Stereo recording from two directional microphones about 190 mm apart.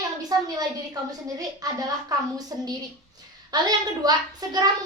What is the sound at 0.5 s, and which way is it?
Speech, 20° right (ahead or behind).